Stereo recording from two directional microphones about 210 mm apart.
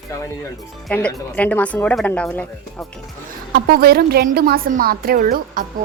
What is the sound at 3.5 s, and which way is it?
A woman's voice, 45° right (ahead or behind).